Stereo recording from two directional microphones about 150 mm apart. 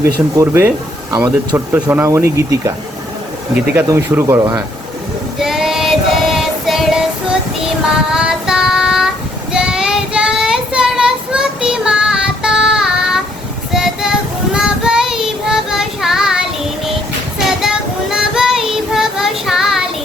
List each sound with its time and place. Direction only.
0.3 s speech: 15° right (ahead or behind)
1.1 s speech: 25° right (ahead or behind)
1.5 s speech: 15° right (ahead or behind)
3.8 s speech: 20° right (ahead or behind)
5.4 s female singing: 5° right (ahead or behind)
7.9 s child singing: 5° right (ahead or behind)
17.4 s child singing: 5° right (ahead or behind)